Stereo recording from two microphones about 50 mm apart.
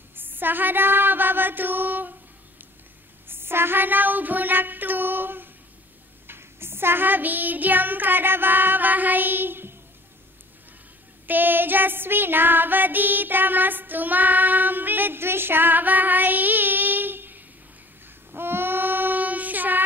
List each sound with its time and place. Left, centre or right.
0.1 s a sound: right
3.3 s child singing: right
11.2 s female singing: right
18.3 s child singing: right